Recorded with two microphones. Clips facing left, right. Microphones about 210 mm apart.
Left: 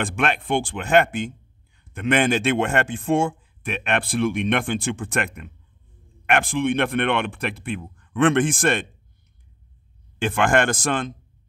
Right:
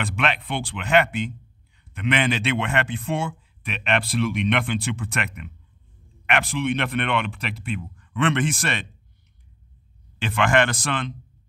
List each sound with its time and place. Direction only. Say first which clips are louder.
0.0 s a man's voice: left 2 dB; 50° left (ahead or behind)
10.1 s a man's voice: left 1 dB; 50° left (ahead or behind)